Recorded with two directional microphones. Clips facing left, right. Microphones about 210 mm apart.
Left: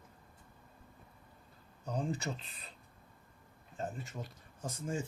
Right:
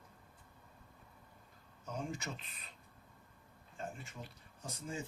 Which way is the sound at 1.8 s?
35° left (ahead or behind).